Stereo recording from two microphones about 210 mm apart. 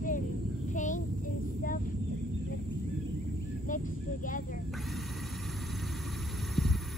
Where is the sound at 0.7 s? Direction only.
35° left (ahead or behind).